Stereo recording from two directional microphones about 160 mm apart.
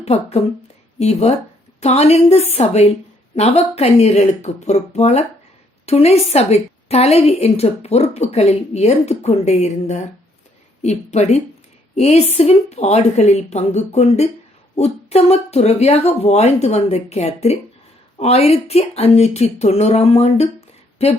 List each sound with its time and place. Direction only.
0.0 s a woman's voice: 40° left (ahead or behind)